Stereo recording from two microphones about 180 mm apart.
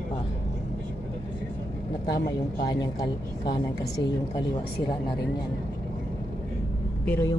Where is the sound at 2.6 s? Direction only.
20° left (ahead or behind).